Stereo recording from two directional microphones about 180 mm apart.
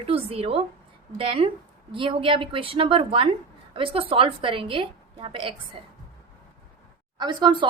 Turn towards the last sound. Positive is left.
turn(degrees=-25)  # may be behind; listen again after turning